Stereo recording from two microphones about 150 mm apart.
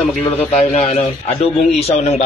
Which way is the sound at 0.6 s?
45° left (ahead or behind).